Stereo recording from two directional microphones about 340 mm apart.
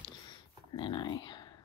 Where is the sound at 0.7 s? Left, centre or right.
Centre.